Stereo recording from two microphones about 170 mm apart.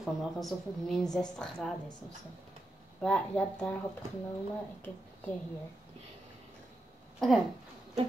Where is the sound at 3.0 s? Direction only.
5° left (ahead or behind).